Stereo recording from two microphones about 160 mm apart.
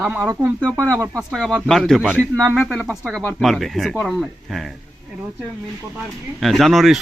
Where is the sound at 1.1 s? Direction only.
5° left (ahead or behind).